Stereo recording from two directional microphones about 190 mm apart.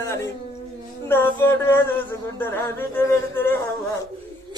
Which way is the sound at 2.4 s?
10° left (ahead or behind).